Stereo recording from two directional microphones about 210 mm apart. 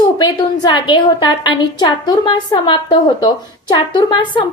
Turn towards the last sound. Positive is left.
turn(degrees=20)  # may be behind; listen again after turning